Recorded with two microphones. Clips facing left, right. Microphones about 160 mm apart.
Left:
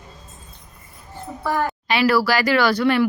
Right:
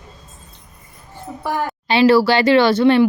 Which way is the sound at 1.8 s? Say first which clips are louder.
Right 7 dB; 25° right (ahead or behind).